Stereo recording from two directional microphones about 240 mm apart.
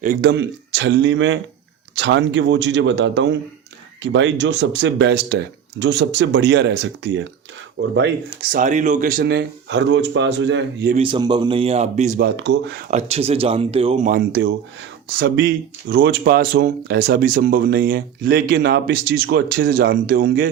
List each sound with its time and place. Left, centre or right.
0.0 s speech: right
8.5 s speech: right
10.9 s speech: right
12.4 s speech: right
12.9 s speech: right